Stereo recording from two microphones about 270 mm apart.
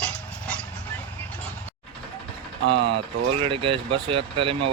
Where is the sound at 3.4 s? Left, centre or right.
Centre.